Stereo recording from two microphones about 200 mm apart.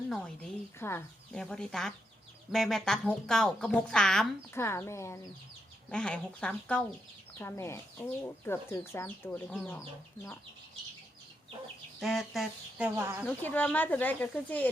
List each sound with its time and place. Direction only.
0.1 s a woman's voice: 5° left (ahead or behind)
4.5 s a woman's voice: 15° left (ahead or behind)
11.9 s a woman's voice: centre (ahead or behind)
13.2 s speech: 10° left (ahead or behind)